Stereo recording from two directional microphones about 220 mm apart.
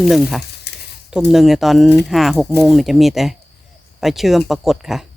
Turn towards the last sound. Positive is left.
turn(degrees=0)  # may be behind; listen again after turning